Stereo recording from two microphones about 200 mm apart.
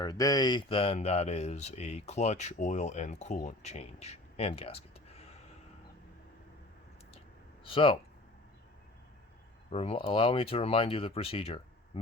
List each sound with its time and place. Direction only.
0.0 s speech: 20° left (ahead or behind)
7.6 s speech: 25° left (ahead or behind)
9.7 s speech: 30° left (ahead or behind)